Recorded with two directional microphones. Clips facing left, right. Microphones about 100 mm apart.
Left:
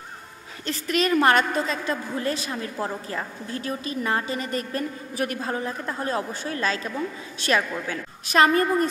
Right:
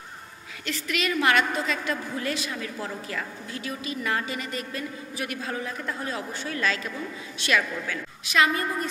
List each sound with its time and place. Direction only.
0.7 s a woman's voice: 40° left (ahead or behind)